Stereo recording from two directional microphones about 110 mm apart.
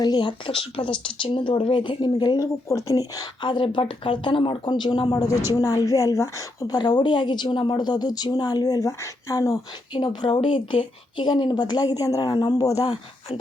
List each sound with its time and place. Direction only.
0.0 s a woman's voice: 45° left (ahead or behind); by 6.7 s 30° left (ahead or behind)
6.7 s a woman's voice: 45° left (ahead or behind)
9.9 s a woman's voice: 40° left (ahead or behind)